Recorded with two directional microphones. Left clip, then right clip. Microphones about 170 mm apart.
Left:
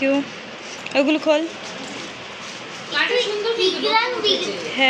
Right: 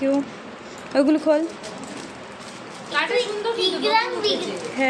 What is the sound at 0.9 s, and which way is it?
Speech, 25° right (ahead or behind).